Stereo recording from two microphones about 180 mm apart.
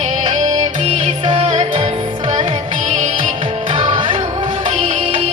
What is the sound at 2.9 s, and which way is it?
Music, 40° right (ahead or behind).